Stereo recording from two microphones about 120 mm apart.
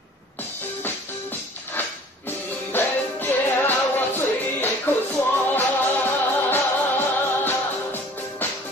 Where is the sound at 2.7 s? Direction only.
15° left (ahead or behind).